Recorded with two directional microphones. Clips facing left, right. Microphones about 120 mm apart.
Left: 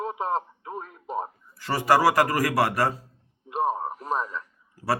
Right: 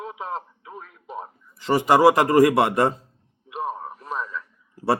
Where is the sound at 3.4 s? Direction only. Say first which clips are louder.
Left 4 dB; 40° left (ahead or behind).